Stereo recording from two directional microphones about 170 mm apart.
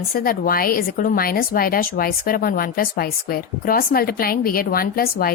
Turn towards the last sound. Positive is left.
turn(degrees=60)  # may be behind; listen again after turning